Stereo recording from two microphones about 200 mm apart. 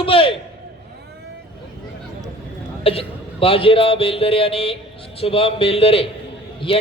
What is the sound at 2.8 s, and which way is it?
A man's voice, 30° left (ahead or behind).